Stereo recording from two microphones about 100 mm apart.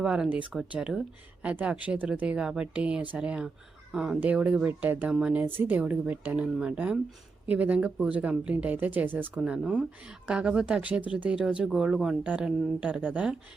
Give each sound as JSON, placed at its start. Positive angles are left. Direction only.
{"t": 0.0, "sound": "a woman's voice", "side_deg": -10}